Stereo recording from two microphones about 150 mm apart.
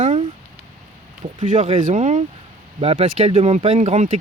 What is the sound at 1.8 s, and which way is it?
Speech, 55° right (ahead or behind).